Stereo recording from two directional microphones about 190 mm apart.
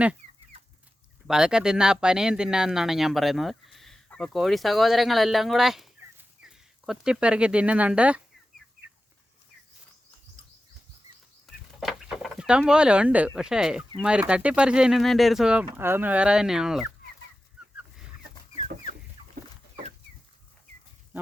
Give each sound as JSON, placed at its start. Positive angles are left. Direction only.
{"t": 0.2, "sound": "chicken", "side_deg": -40}
{"t": 1.3, "sound": "speech", "side_deg": -5}
{"t": 11.8, "sound": "speech", "side_deg": 0}
{"t": 19.2, "sound": "chicken", "side_deg": -30}